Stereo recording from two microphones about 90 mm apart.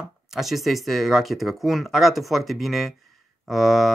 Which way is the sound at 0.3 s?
Centre (ahead or behind).